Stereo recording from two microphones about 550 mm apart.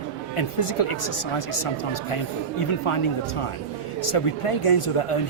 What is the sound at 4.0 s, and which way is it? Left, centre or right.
Speech, left.